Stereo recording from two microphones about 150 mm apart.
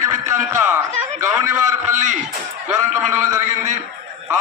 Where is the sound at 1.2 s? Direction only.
20° right (ahead or behind).